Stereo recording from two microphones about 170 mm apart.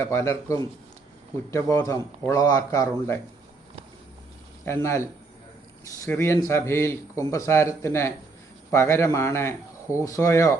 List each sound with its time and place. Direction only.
0.0 s speech: 15° left (ahead or behind)
1.7 s speech: 20° left (ahead or behind)
4.6 s speech: 15° left (ahead or behind)